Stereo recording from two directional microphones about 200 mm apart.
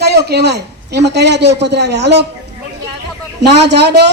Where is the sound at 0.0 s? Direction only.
55° right (ahead or behind).